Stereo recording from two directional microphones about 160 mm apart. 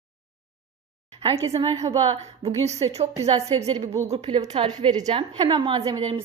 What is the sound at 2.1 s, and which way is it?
A woman's voice, 40° right (ahead or behind).